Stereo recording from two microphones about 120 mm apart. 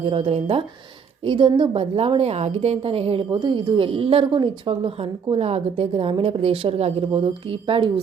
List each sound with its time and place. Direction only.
0.0 s a woman's voice: 50° right (ahead or behind)
5.3 s a woman's voice: 60° right (ahead or behind)